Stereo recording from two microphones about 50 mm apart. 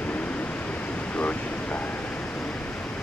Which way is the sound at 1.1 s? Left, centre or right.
Left.